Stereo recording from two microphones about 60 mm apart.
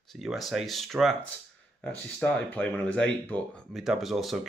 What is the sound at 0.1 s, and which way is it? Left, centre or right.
Speech, centre.